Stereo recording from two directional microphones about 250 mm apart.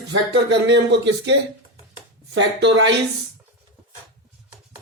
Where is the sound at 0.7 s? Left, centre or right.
Right.